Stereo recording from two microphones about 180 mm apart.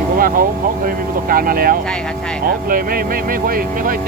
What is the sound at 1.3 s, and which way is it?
Speech, 55° right (ahead or behind).